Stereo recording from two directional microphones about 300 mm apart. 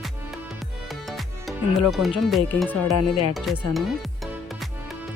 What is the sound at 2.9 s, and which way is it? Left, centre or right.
Speech, left.